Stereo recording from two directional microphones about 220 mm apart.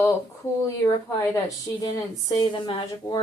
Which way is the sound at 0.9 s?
15° left (ahead or behind).